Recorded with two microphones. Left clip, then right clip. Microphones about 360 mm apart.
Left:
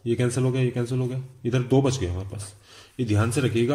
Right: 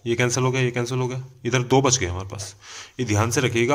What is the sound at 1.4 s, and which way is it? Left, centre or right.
Speech, right.